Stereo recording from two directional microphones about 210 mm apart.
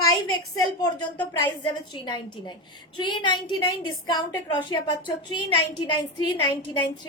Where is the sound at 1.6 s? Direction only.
20° left (ahead or behind).